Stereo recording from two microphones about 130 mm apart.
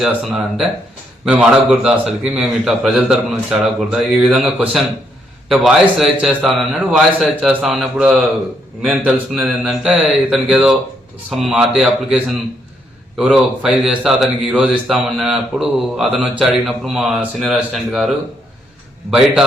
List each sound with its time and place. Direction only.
0.0 s a man's voice: 5° right (ahead or behind)
19.1 s a man's voice: 5° right (ahead or behind)